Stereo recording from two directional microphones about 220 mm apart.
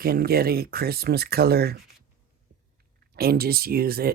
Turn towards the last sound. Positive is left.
turn(degrees=-45)  # may be behind; listen again after turning